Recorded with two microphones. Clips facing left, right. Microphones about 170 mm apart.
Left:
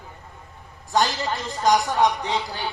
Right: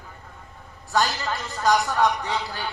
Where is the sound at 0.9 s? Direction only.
20° left (ahead or behind).